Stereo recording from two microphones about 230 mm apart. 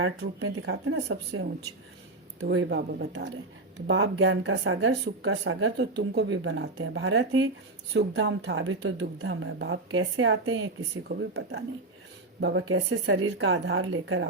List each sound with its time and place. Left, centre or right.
0.0 s speech: right
2.4 s speech: right
3.8 s a woman's voice: right
11.1 s a woman's voice: right